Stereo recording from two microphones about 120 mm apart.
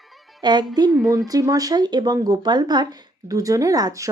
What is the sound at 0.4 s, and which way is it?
A woman's voice, 35° right (ahead or behind).